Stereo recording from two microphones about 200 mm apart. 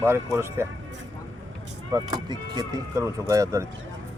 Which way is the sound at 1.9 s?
20° right (ahead or behind).